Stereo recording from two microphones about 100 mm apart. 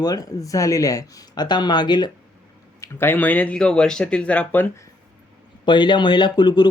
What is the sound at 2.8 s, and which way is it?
Speech, 25° left (ahead or behind).